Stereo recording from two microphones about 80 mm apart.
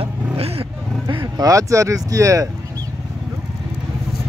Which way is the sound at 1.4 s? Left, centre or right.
Right.